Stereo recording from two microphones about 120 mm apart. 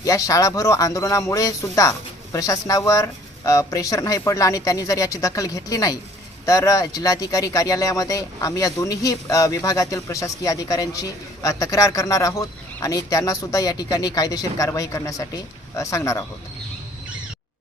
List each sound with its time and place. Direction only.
0.0 s speech: 30° left (ahead or behind)